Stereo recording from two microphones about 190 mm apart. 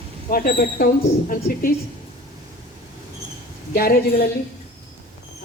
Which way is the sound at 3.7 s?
55° left (ahead or behind).